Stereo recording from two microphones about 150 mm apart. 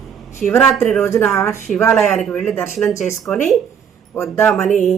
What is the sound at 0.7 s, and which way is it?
Speech, 5° left (ahead or behind).